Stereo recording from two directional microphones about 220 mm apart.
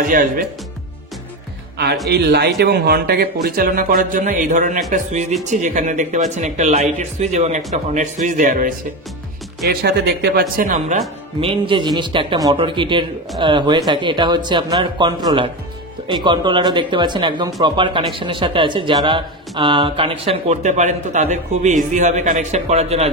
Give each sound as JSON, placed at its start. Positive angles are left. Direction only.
{"t": 0.0, "sound": "speech", "side_deg": -40}
{"t": 2.0, "sound": "speech", "side_deg": -50}
{"t": 11.4, "sound": "speech", "side_deg": -20}